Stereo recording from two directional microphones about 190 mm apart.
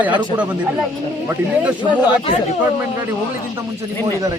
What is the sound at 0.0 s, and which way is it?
Speech, 10° right (ahead or behind).